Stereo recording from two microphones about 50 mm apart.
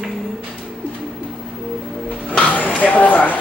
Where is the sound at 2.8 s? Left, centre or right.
Left.